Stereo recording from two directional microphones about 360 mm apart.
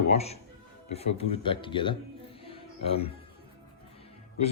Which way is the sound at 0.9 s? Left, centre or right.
Centre.